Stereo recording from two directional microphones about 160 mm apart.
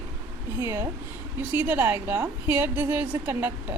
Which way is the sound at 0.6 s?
20° right (ahead or behind).